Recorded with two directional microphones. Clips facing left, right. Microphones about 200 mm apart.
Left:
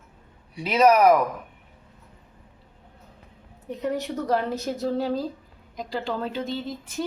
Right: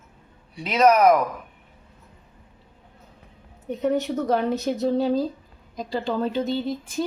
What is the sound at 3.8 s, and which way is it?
Speech, 25° right (ahead or behind).